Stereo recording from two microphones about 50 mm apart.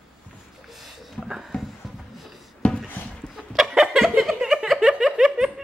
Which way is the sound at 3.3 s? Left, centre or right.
Centre.